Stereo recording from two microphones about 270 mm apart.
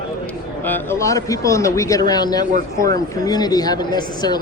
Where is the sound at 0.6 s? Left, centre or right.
Centre.